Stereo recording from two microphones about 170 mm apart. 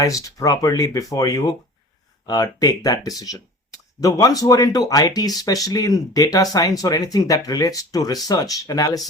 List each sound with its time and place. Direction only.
0.0 s speech: 20° left (ahead or behind)